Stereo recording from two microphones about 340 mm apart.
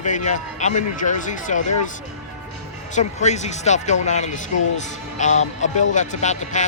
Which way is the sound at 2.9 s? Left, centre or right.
Centre.